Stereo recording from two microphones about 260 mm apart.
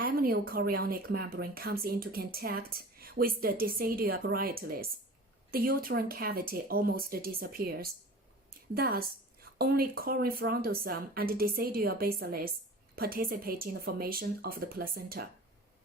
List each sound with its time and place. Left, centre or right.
0.0 s a woman's voice: right